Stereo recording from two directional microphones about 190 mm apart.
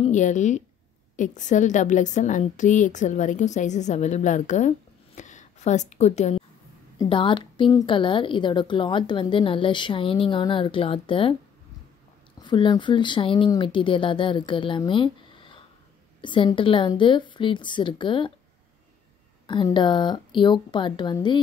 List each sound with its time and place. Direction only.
0.0 s a woman's voice: 40° left (ahead or behind)
7.0 s a woman's voice: 25° left (ahead or behind)
12.4 s a woman's voice: 25° left (ahead or behind)
19.4 s a woman's voice: 25° left (ahead or behind)